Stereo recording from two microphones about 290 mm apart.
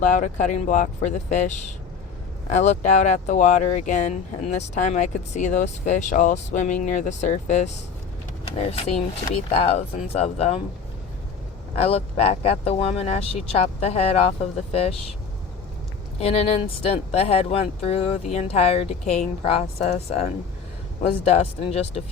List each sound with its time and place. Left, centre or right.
0.0 s speech: left
8.7 s speech: centre
11.8 s speech: centre
16.2 s speech: left